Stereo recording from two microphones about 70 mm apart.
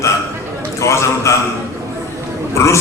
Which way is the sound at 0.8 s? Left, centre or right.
Left.